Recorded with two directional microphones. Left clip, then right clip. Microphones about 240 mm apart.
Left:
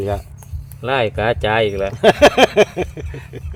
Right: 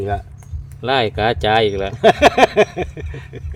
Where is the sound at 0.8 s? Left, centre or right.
Right.